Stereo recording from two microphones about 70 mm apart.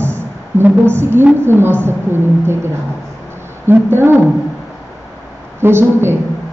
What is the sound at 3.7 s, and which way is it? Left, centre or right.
Speech, right.